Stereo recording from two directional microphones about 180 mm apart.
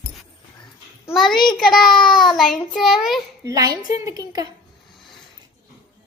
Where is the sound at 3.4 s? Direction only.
20° right (ahead or behind).